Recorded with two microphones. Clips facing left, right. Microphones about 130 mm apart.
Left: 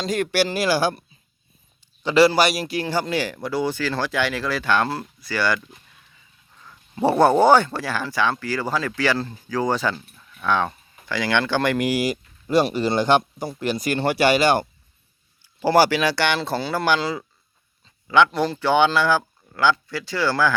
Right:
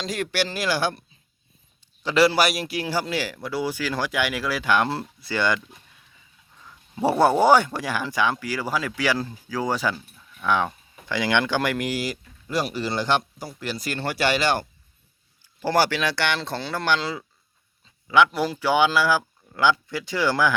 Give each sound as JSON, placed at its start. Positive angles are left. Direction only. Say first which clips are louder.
{"t": 0.0, "sound": "speech", "louder": "left 5 dB", "side_deg": 0}
{"t": 2.0, "sound": "speech", "louder": "left 3 dB", "side_deg": 0}
{"t": 4.9, "sound": "speech", "louder": "even", "side_deg": -25}
{"t": 6.7, "sound": "speech", "louder": "left 2 dB", "side_deg": -10}
{"t": 11.9, "sound": "speech", "louder": "left 5 dB", "side_deg": 15}